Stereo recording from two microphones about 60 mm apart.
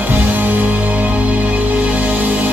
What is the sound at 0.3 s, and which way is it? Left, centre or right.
Music, right.